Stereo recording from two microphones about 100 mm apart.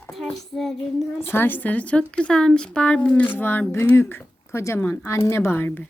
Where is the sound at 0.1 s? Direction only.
Centre (ahead or behind).